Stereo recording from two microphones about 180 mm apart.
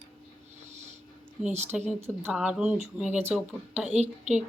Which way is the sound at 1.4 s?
10° right (ahead or behind).